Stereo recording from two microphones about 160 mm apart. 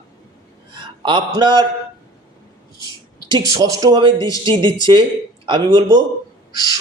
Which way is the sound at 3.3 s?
25° right (ahead or behind).